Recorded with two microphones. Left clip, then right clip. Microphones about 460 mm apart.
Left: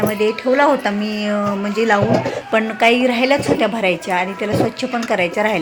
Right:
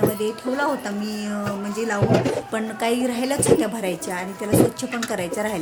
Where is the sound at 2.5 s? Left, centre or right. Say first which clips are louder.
Left 9 dB; right.